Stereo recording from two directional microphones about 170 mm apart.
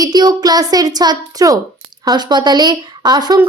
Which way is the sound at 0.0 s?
25° right (ahead or behind).